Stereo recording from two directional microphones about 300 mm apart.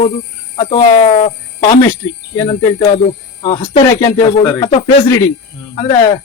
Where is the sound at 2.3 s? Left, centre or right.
Centre.